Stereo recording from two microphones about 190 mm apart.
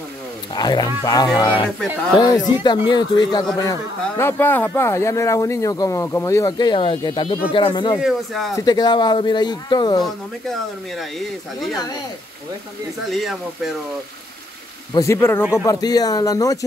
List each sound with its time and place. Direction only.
0.6 s speech: 20° left (ahead or behind)
4.2 s speech: 10° left (ahead or behind)
8.0 s speech: centre (ahead or behind)
8.5 s speech: 20° left (ahead or behind)
10.0 s speech: centre (ahead or behind)
13.1 s speech: centre (ahead or behind)
15.0 s speech: 15° left (ahead or behind)